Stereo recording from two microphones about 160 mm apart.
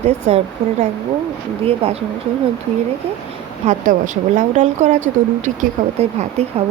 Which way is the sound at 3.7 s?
50° right (ahead or behind).